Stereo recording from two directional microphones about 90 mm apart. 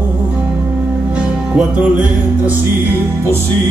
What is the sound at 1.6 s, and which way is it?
Music, 15° right (ahead or behind).